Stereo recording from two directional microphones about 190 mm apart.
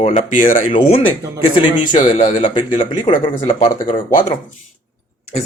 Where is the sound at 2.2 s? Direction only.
25° left (ahead or behind).